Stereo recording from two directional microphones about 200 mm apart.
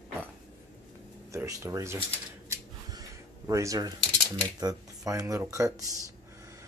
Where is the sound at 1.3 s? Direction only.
15° right (ahead or behind).